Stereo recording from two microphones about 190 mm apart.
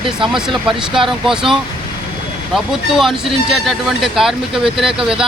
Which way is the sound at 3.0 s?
Centre (ahead or behind).